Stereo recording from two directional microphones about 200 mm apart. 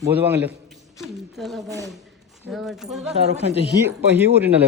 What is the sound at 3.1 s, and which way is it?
Speech, 35° right (ahead or behind).